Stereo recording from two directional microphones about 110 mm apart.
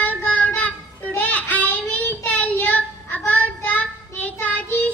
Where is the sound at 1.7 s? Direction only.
15° left (ahead or behind).